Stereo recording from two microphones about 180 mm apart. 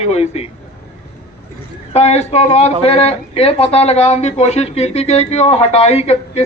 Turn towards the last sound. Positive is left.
turn(degrees=35)  # may be behind; listen again after turning